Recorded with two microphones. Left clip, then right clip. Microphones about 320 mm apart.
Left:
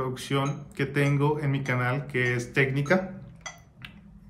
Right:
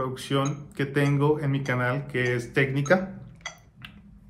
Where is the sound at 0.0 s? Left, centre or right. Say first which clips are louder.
Right 1 dB; centre.